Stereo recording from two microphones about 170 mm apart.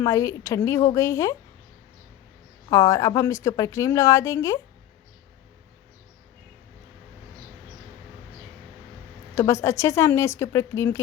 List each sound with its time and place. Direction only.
0.0 s a woman's voice: 20° left (ahead or behind)
2.6 s a woman's voice: 20° left (ahead or behind)
9.3 s a woman's voice: 15° left (ahead or behind)